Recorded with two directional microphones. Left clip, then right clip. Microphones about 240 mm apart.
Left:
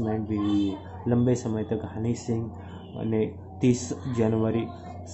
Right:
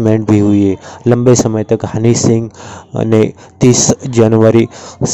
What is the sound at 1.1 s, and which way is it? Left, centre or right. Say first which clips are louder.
Speech: right 16 dB; right.